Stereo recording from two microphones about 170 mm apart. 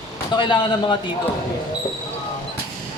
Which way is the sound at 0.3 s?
30° left (ahead or behind).